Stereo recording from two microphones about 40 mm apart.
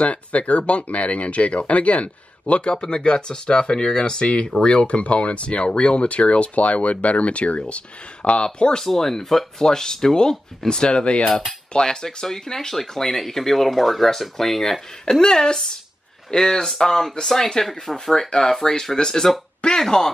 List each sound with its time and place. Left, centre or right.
0.0 s speech: left; by 4.3 s centre
4.6 s speech: left
8.8 s speech: centre